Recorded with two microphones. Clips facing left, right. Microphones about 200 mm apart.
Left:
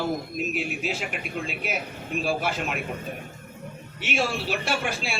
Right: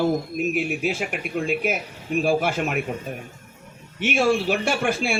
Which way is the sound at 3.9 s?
50° right (ahead or behind).